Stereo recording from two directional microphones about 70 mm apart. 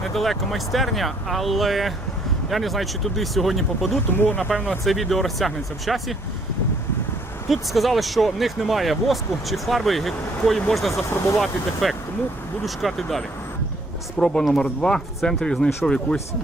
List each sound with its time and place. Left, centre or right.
0.1 s speech: centre
4.2 s speech: left
4.4 s speech: centre
4.9 s speech: centre
7.5 s speech: centre